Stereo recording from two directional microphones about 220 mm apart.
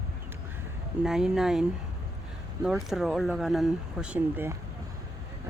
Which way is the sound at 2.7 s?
Centre (ahead or behind).